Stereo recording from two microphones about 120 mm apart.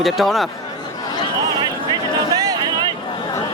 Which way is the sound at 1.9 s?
35° right (ahead or behind).